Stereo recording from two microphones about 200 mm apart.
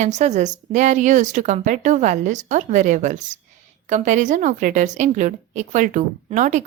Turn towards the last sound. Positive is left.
turn(degrees=-40)  # may be behind; listen again after turning